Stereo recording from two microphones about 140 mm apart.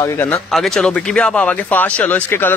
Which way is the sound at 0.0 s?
20° left (ahead or behind).